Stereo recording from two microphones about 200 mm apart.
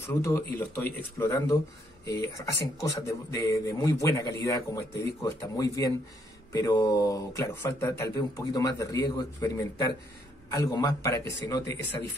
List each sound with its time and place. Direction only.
0.0 s speech: 10° left (ahead or behind)